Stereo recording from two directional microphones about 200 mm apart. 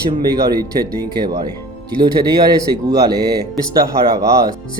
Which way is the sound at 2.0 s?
20° right (ahead or behind).